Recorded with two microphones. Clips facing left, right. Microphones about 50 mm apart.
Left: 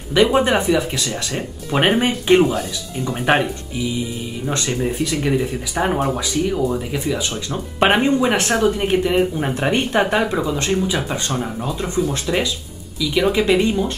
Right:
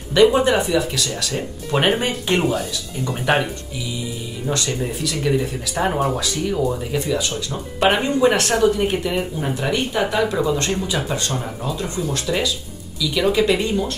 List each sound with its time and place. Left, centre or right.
0.1 s speech: centre
5.4 s speech: centre
7.2 s speech: left
9.4 s speech: left
10.3 s speech: centre